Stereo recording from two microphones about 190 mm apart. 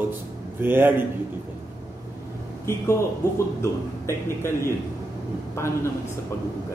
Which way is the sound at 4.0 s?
15° left (ahead or behind).